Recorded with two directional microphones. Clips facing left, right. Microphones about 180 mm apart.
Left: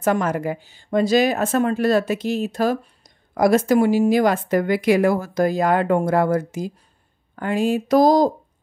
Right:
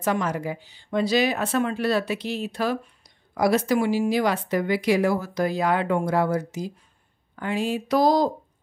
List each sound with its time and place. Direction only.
0.0 s a woman's voice: 50° left (ahead or behind)